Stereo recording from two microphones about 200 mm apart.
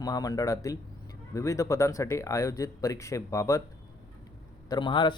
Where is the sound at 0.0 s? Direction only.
20° left (ahead or behind).